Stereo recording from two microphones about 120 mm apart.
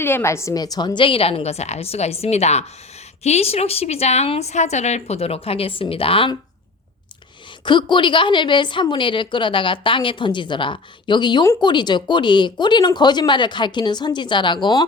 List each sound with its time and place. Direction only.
0.0 s a woman's voice: 20° left (ahead or behind); by 6.3 s 50° left (ahead or behind)
7.6 s a woman's voice: 40° left (ahead or behind)